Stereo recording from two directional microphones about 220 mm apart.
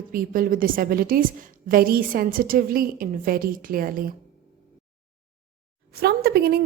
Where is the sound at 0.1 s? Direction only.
40° right (ahead or behind).